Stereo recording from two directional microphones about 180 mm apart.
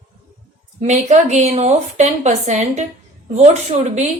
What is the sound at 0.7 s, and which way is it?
A woman's voice, 40° right (ahead or behind).